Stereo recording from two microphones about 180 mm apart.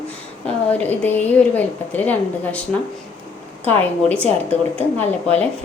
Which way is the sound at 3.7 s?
10° left (ahead or behind).